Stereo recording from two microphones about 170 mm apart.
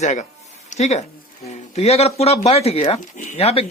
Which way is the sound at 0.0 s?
45° left (ahead or behind).